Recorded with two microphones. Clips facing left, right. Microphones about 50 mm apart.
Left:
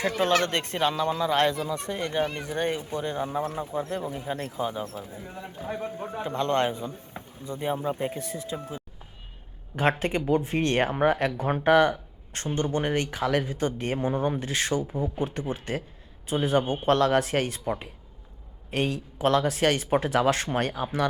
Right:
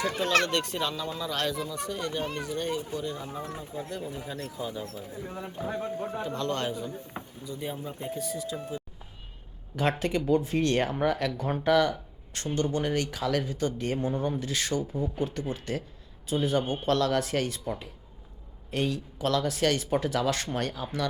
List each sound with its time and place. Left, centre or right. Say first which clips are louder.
0.4 s speech: left 3 dB; left
1.3 s speech: left 7 dB; left
3.3 s speech: left 7 dB; left
4.1 s speech: left 4 dB; left
6.2 s speech: left 8 dB; left
7.4 s speech: left 7 dB; left
7.8 s speech: left 5 dB; left
10.0 s speech: left 1 dB; left
14.7 s a man's voice: left 2 dB; centre